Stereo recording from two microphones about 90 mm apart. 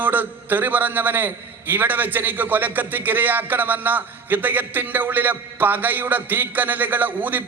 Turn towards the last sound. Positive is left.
turn(degrees=-20)  # may be behind; listen again after turning